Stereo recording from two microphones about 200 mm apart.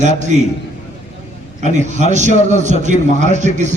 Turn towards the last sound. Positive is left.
turn(degrees=-35)  # may be behind; listen again after turning